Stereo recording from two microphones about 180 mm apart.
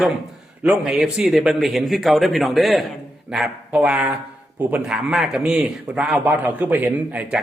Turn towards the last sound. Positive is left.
turn(degrees=-10)  # may be behind; listen again after turning